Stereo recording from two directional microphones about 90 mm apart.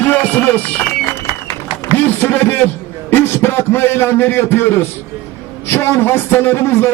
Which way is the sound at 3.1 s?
20° left (ahead or behind).